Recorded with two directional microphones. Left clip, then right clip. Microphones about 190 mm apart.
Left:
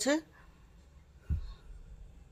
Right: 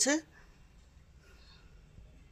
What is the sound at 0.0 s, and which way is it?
Speech, centre (ahead or behind).